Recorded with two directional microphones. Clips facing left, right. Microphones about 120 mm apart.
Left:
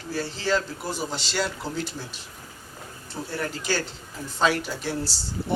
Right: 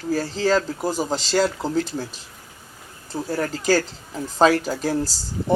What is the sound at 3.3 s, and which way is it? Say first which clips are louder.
Speech: right 8 dB; 40° right (ahead or behind).